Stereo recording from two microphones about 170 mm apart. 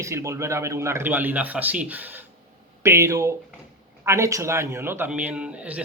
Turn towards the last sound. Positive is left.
turn(degrees=-10)  # may be behind; listen again after turning